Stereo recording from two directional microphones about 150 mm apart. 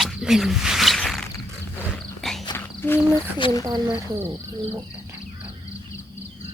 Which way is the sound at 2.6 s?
15° left (ahead or behind).